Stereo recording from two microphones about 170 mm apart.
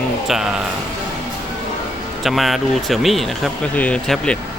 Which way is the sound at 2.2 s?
Centre (ahead or behind).